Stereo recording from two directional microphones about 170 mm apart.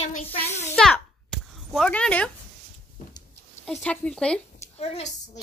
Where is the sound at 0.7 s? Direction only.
5° left (ahead or behind).